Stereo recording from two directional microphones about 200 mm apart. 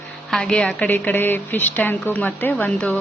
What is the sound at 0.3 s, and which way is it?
A man's voice, 5° left (ahead or behind).